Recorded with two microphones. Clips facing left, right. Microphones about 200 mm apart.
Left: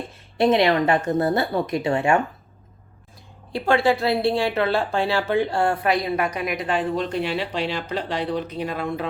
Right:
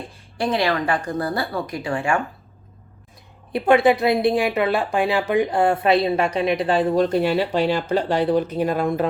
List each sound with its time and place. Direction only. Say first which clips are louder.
0.3 s speech: left 4 dB; 20° left (ahead or behind)
3.5 s speech: right 4 dB; 20° right (ahead or behind); by 9.0 s 45° right (ahead or behind)